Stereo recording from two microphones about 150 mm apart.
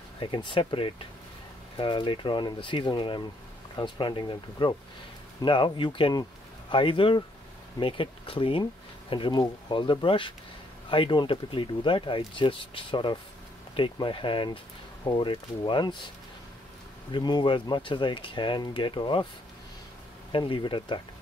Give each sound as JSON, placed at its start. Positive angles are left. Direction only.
{"t": 0.2, "sound": "speech", "side_deg": 30}
{"t": 17.1, "sound": "speech", "side_deg": 30}
{"t": 20.3, "sound": "speech", "side_deg": 35}